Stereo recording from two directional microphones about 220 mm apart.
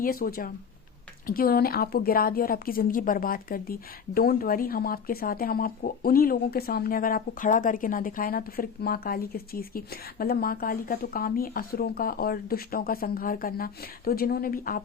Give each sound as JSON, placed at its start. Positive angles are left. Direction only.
{"t": 0.0, "sound": "a woman's voice", "side_deg": 40}